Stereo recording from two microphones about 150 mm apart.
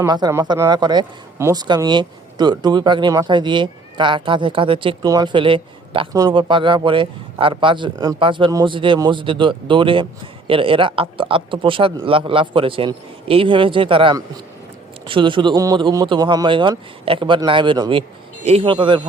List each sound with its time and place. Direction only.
0.1 s a man's voice: 25° right (ahead or behind)